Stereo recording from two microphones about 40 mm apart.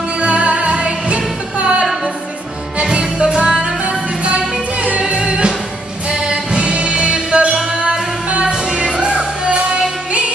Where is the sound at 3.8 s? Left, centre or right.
Right.